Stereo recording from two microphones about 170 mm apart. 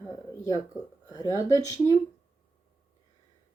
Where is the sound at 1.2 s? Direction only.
20° left (ahead or behind).